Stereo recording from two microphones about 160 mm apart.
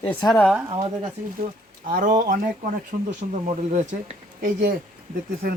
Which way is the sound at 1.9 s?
60° right (ahead or behind).